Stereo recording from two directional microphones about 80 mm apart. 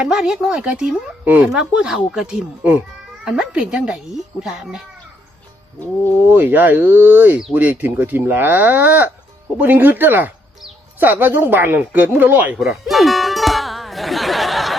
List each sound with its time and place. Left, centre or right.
0.0 s speech: centre
6.2 s speech: right
12.5 s music: centre